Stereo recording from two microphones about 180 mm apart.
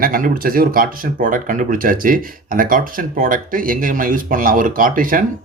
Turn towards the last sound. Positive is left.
turn(degrees=-50)  # may be behind; listen again after turning